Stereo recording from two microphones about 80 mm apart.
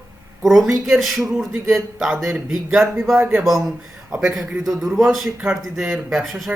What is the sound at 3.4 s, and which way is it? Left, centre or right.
A man's voice, centre.